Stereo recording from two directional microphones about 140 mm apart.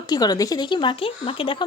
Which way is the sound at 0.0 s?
30° left (ahead or behind).